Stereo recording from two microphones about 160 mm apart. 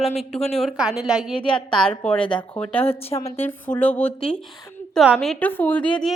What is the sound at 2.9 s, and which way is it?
Speech, 35° left (ahead or behind).